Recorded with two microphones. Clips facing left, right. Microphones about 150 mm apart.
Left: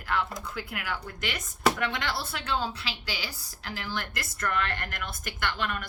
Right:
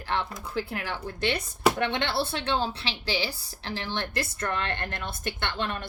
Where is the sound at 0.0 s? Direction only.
30° right (ahead or behind).